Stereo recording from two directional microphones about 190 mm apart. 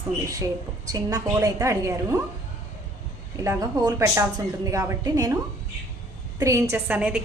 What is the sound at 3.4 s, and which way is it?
A woman's voice, 20° right (ahead or behind).